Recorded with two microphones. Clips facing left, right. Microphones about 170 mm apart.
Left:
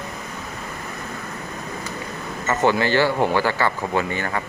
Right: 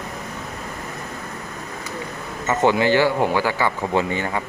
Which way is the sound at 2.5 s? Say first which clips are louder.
Right 2 dB; 15° right (ahead or behind).